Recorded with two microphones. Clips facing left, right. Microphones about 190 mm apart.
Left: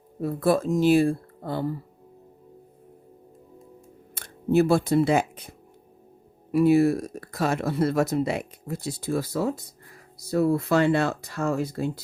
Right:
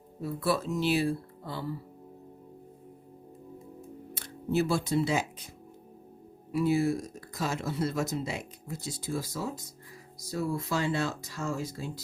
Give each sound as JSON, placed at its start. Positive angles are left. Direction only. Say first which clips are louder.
{"t": 0.2, "sound": "speech", "louder": "left 7 dB", "side_deg": 55}
{"t": 4.1, "sound": "speech", "louder": "left 8 dB", "side_deg": 55}
{"t": 6.5, "sound": "speech", "louder": "left 8 dB", "side_deg": 60}